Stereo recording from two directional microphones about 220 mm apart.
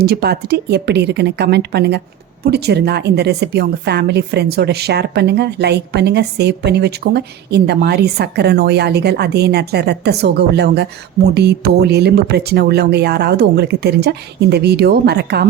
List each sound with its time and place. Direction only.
0.0 s a woman's voice: 45° right (ahead or behind)